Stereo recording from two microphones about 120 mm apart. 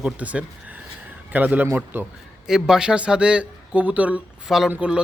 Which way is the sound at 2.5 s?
5° right (ahead or behind).